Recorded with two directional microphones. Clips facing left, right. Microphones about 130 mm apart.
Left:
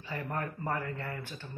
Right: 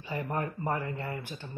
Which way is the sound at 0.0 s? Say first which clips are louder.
Right 3 dB; 15° right (ahead or behind).